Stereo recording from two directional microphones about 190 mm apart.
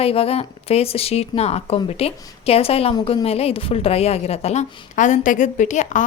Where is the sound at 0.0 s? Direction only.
30° left (ahead or behind).